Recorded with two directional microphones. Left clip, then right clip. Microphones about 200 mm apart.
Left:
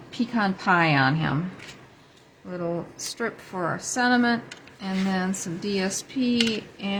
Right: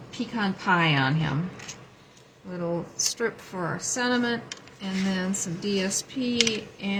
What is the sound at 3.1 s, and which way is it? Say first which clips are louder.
Speech: right 1 dB; 10° left (ahead or behind).